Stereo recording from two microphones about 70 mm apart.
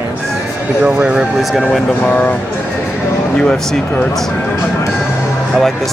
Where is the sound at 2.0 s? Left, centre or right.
Left.